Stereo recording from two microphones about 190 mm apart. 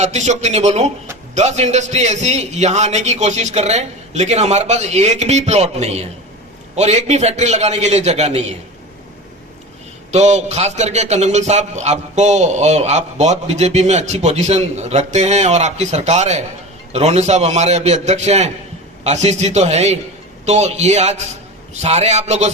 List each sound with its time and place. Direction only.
0.0 s a man's voice: 35° right (ahead or behind)
10.1 s a man's voice: 35° right (ahead or behind)